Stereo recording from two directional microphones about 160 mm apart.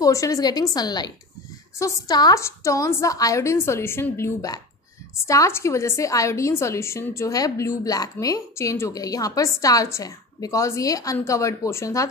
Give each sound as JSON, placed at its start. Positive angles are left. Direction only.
{"t": 0.0, "sound": "a woman's voice", "side_deg": 20}